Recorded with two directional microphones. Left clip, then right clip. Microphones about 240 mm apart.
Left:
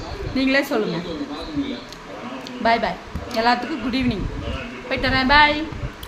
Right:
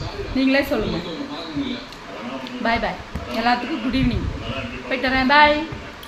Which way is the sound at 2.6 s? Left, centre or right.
Centre.